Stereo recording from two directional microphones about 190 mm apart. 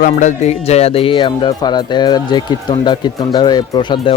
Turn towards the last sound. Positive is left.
turn(degrees=25)  # may be behind; listen again after turning